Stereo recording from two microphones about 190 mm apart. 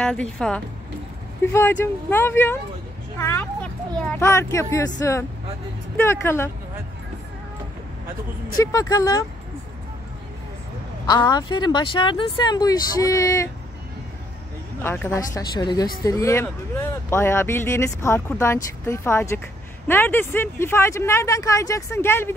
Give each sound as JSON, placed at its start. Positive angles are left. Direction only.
{"t": 0.0, "sound": "speech", "side_deg": 5}
{"t": 8.5, "sound": "speech", "side_deg": 20}
{"t": 11.1, "sound": "speech", "side_deg": 20}
{"t": 14.8, "sound": "speech", "side_deg": 10}